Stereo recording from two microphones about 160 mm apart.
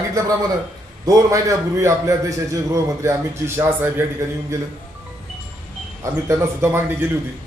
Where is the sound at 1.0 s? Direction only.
20° right (ahead or behind).